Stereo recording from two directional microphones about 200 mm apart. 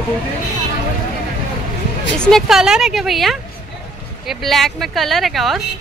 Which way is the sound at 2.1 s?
5° left (ahead or behind).